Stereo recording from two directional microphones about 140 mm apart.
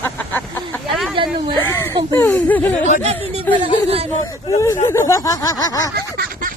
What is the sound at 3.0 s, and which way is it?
Speech, 50° right (ahead or behind).